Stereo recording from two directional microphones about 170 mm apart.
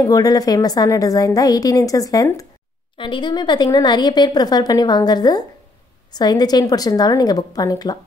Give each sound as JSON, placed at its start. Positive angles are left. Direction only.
{"t": 0.0, "sound": "a woman's voice", "side_deg": 20}